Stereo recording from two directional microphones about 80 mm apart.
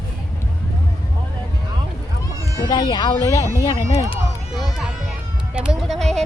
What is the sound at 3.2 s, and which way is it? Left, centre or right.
Speech, left.